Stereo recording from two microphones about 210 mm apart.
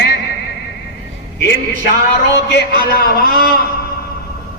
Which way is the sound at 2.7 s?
45° left (ahead or behind).